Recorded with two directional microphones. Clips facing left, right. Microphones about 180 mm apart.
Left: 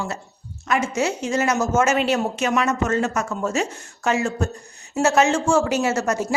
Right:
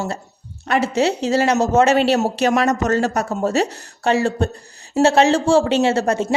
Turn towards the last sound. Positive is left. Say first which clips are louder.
# right 4 dB
turn(degrees=-30)  # may be behind; listen again after turning